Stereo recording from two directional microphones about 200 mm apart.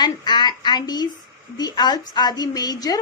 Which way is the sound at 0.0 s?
20° left (ahead or behind).